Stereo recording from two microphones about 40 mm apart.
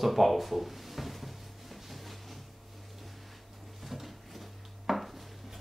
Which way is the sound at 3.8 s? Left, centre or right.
Centre.